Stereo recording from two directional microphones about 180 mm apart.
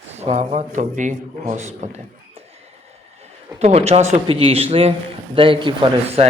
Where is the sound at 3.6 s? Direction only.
35° right (ahead or behind).